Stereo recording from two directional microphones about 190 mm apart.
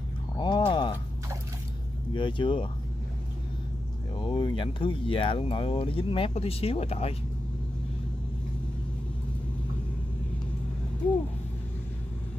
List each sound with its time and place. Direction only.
0.4 s a sound: 25° left (ahead or behind)
2.1 s speech: 25° left (ahead or behind)
4.2 s speech: 25° left (ahead or behind)